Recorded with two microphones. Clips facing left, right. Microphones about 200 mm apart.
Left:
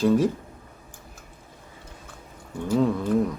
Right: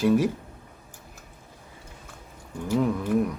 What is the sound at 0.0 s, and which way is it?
Speech, 10° right (ahead or behind).